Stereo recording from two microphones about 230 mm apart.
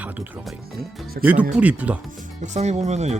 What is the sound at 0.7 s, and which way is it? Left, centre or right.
Speech, right.